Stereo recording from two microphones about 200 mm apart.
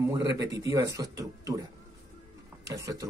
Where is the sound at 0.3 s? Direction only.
15° right (ahead or behind).